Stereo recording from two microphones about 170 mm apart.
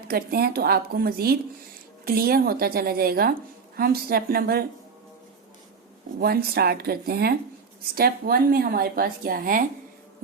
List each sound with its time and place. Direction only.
0.1 s speech: 65° right (ahead or behind)
6.1 s speech: 65° right (ahead or behind)